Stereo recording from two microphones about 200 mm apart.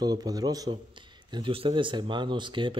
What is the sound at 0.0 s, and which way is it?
A man's voice, 20° right (ahead or behind).